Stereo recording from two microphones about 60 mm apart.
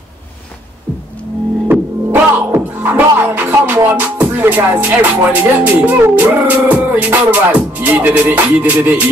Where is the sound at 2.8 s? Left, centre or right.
Right.